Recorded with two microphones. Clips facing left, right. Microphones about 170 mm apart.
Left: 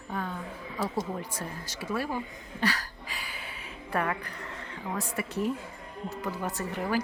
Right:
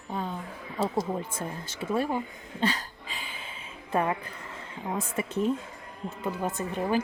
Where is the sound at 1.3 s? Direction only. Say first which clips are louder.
Right 2 dB; 25° right (ahead or behind).